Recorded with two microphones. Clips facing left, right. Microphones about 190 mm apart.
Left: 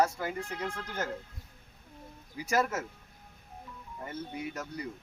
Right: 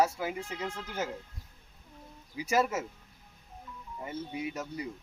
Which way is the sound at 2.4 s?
10° right (ahead or behind).